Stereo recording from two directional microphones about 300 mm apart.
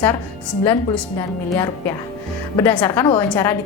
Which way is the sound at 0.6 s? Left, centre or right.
Centre.